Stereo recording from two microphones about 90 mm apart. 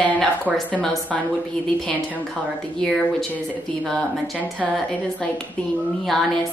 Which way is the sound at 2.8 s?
Centre (ahead or behind).